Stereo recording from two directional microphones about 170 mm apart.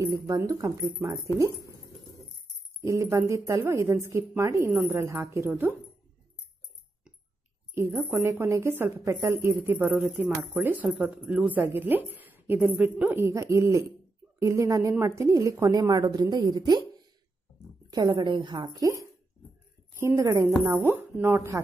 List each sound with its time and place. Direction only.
0.0 s a woman's voice: 15° right (ahead or behind)
2.8 s a woman's voice: 15° right (ahead or behind)
7.7 s a woman's voice: 15° right (ahead or behind)
17.8 s a woman's voice: 25° right (ahead or behind)
20.0 s a woman's voice: 15° right (ahead or behind)